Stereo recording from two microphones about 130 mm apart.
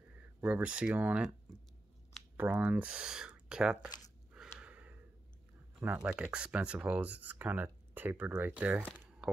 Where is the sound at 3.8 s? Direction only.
30° left (ahead or behind).